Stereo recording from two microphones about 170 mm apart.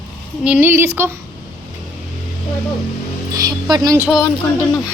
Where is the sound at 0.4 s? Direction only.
10° right (ahead or behind).